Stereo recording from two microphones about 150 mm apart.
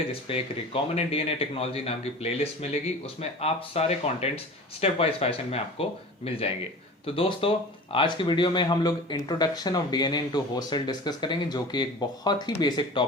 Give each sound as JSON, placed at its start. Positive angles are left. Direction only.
{"t": 0.1, "sound": "a man's voice", "side_deg": 40}